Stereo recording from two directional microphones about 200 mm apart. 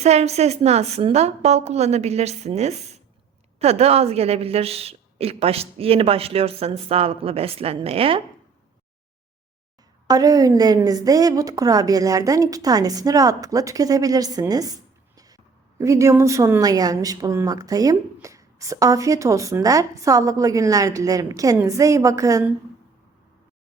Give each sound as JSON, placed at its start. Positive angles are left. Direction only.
{"t": 0.0, "sound": "a woman's voice", "side_deg": -30}
{"t": 10.1, "sound": "a woman's voice", "side_deg": -20}